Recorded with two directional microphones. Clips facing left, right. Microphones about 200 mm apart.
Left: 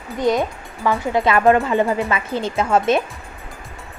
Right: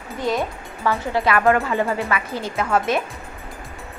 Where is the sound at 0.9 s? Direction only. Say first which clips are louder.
Left 2 dB; 20° left (ahead or behind).